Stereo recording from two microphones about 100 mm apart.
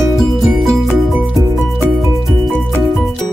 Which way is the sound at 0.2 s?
Centre (ahead or behind).